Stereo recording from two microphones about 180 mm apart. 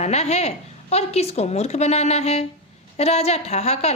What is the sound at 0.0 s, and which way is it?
A woman's voice, 35° left (ahead or behind).